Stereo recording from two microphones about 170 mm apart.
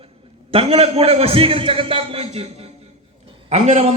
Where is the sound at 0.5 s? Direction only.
35° right (ahead or behind).